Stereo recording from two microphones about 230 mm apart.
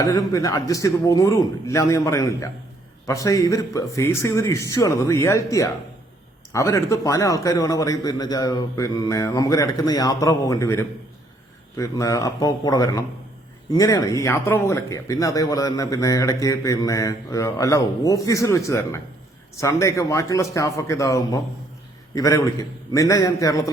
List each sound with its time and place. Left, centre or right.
0.0 s speech: centre